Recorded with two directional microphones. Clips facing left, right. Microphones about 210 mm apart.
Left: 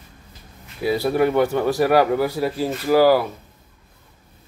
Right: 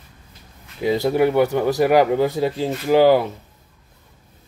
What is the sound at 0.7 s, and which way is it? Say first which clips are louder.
A man's voice: right 1 dB; 20° right (ahead or behind).